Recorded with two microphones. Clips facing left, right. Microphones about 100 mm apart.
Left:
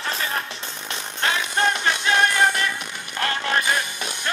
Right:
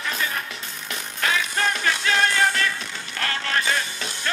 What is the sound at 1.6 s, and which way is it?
Music, 20° left (ahead or behind).